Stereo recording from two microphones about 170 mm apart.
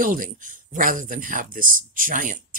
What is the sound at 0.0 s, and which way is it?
Speech, 55° right (ahead or behind).